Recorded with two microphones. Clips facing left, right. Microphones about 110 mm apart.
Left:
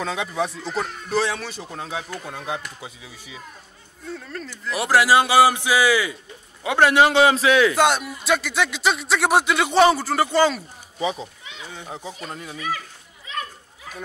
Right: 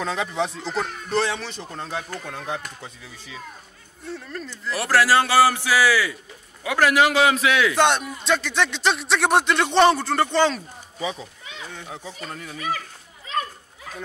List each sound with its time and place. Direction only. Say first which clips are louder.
0.0 s speech: even; centre (ahead or behind)
4.1 s speech: even; centre (ahead or behind)
4.5 s a man's voice: left 2 dB; 15° left (ahead or behind); by 7.7 s 35° left (ahead or behind)
7.7 s speech: even; 5° left (ahead or behind)
11.0 s speech: left 4 dB; 25° left (ahead or behind)